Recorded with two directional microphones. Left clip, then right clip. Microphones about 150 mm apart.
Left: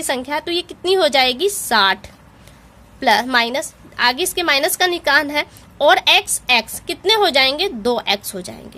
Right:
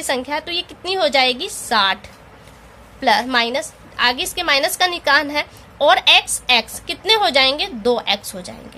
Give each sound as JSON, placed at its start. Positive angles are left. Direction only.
{"t": 0.0, "sound": "a woman's voice", "side_deg": 45}